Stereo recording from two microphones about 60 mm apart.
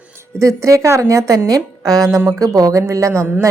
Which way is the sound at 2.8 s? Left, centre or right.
Right.